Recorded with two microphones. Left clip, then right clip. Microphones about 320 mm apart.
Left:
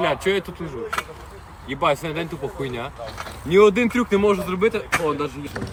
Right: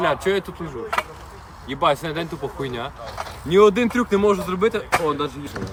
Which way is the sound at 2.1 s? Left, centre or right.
Right.